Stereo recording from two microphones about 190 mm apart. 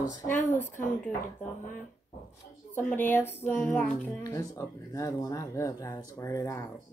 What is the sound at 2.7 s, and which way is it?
Speech, 10° left (ahead or behind).